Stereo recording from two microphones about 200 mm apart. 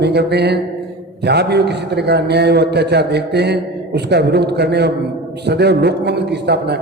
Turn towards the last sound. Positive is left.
turn(degrees=-55)  # may be behind; listen again after turning